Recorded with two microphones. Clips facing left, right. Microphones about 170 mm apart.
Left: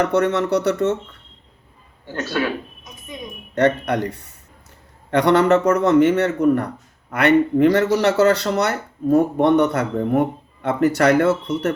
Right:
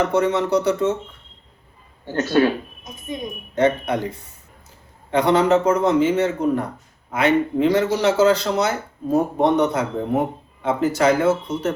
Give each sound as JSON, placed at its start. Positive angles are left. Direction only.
{"t": 0.0, "sound": "a man's voice", "side_deg": 65}
{"t": 2.1, "sound": "speech", "side_deg": -20}
{"t": 3.5, "sound": "a man's voice", "side_deg": 70}
{"t": 5.1, "sound": "a man's voice", "side_deg": 65}